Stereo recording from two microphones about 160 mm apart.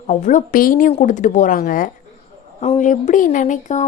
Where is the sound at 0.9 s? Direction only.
50° left (ahead or behind).